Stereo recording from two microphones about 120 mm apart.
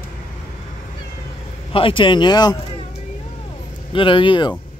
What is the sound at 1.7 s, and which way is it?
Speech, 45° left (ahead or behind).